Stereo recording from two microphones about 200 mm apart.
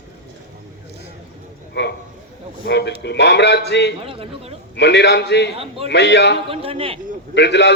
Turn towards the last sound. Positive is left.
turn(degrees=60)  # may be behind; listen again after turning